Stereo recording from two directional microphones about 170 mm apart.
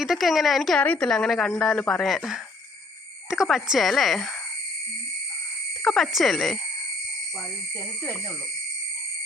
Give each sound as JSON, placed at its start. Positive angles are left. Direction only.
{"t": 0.0, "sound": "speech", "side_deg": 0}
{"t": 5.8, "sound": "speech", "side_deg": 0}